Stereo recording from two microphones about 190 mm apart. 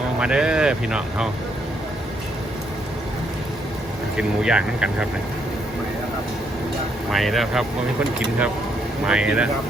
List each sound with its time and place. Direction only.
0.2 s speech: 5° right (ahead or behind)
4.2 s speech: 5° right (ahead or behind)
7.1 s speech: centre (ahead or behind)
9.0 s speech: 5° right (ahead or behind)